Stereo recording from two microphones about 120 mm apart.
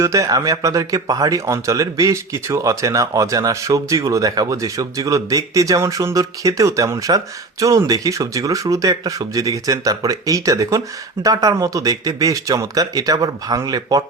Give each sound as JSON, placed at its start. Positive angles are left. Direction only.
{"t": 0.0, "sound": "speech", "side_deg": -25}